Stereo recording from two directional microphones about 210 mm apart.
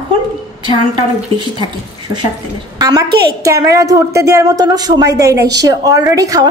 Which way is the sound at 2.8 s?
15° right (ahead or behind).